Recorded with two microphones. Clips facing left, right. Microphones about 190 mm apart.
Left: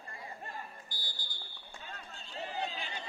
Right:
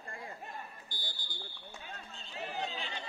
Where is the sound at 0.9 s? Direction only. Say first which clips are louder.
Right 1 dB; 50° right (ahead or behind).